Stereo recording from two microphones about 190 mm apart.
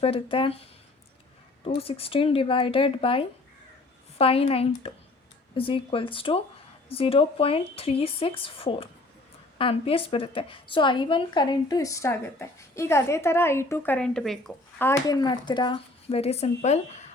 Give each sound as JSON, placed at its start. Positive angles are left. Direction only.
{"t": 0.0, "sound": "speech", "side_deg": 30}
{"t": 1.6, "sound": "a woman's voice", "side_deg": 30}
{"t": 14.8, "sound": "a woman's voice", "side_deg": 20}